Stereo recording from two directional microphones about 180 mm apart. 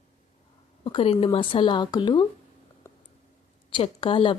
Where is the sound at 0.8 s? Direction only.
30° left (ahead or behind).